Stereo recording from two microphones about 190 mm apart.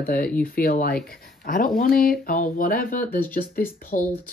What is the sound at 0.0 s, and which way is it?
Speech, 50° left (ahead or behind).